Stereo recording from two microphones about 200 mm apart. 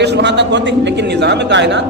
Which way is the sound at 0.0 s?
60° right (ahead or behind).